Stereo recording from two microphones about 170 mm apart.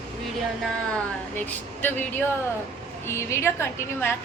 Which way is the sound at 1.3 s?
10° left (ahead or behind).